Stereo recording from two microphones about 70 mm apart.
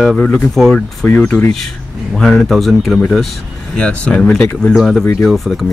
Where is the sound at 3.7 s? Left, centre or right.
Centre.